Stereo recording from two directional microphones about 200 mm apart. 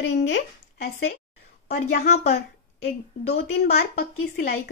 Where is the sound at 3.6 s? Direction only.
50° left (ahead or behind).